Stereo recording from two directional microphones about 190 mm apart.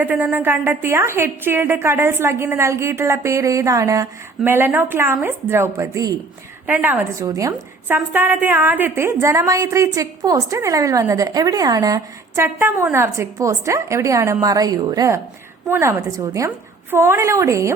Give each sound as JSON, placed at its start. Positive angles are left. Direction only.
{"t": 0.0, "sound": "a woman's voice", "side_deg": -10}